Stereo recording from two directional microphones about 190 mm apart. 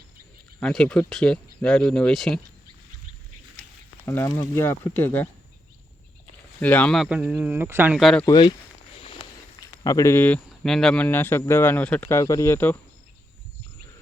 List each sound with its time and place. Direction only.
0.6 s speech: 5° left (ahead or behind)
3.5 s speech: 10° left (ahead or behind)
6.6 s speech: 10° left (ahead or behind); by 7.9 s 10° right (ahead or behind)
7.9 s speech: centre (ahead or behind)
8.2 s speech: 25° left (ahead or behind)
9.8 s speech: 15° left (ahead or behind)